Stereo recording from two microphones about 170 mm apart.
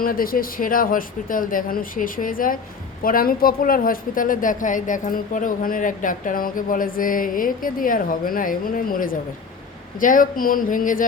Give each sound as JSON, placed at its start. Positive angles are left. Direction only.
{"t": 0.0, "sound": "a woman's voice", "side_deg": 55}